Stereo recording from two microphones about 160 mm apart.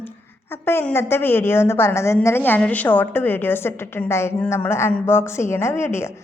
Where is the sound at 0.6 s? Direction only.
15° left (ahead or behind).